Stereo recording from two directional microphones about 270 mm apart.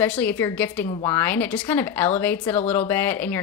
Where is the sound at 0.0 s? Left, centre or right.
Centre.